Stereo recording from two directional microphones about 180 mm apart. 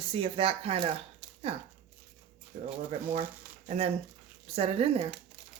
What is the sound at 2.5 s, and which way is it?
Speech, 40° right (ahead or behind).